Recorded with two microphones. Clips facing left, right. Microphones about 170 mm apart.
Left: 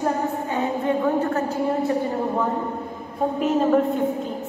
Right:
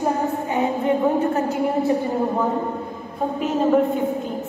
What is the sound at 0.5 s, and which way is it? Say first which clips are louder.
Music: right 3 dB; 15° right (ahead or behind).